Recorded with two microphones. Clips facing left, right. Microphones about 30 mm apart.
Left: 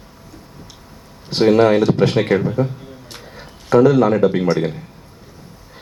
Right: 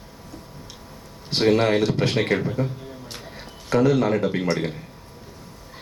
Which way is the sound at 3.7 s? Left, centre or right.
Left.